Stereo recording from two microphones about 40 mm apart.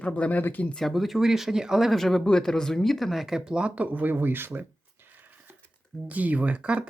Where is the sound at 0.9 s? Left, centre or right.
Centre.